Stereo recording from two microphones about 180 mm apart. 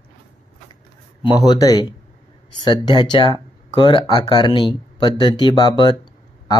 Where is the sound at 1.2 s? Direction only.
20° left (ahead or behind).